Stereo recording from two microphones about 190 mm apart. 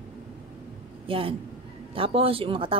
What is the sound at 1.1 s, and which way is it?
Speech, 30° right (ahead or behind).